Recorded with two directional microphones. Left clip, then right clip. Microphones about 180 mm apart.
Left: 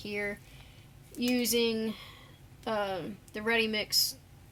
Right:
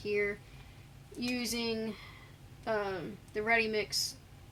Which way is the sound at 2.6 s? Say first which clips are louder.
Left 2 dB; 35° left (ahead or behind).